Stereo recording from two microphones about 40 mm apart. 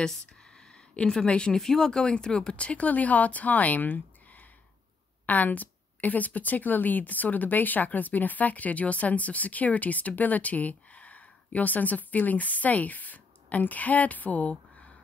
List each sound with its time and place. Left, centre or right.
0.1 s a sound: centre
1.1 s speech: left
1.6 s a woman's voice: centre; by 14.5 s left